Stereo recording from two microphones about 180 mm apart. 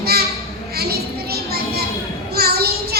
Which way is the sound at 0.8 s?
60° right (ahead or behind).